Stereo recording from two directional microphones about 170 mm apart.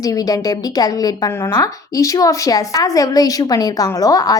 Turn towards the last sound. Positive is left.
turn(degrees=20)  # may be behind; listen again after turning